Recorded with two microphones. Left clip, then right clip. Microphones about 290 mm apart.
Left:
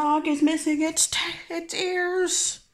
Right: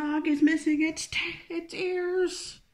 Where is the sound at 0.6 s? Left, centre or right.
Centre.